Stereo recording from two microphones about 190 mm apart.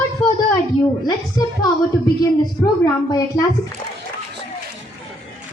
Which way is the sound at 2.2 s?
20° left (ahead or behind).